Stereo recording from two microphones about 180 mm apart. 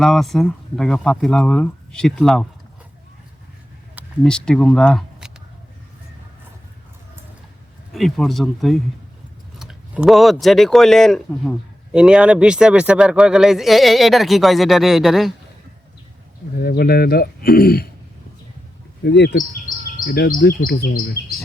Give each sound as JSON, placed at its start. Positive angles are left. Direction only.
{"t": 0.0, "sound": "a man's voice", "side_deg": 0}
{"t": 4.2, "sound": "a man's voice", "side_deg": 5}
{"t": 7.9, "sound": "a man's voice", "side_deg": 0}
{"t": 9.6, "sound": "a sound", "side_deg": -5}
{"t": 10.4, "sound": "a man's voice", "side_deg": 0}
{"t": 16.6, "sound": "speech", "side_deg": 55}
{"t": 19.0, "sound": "speech", "side_deg": 70}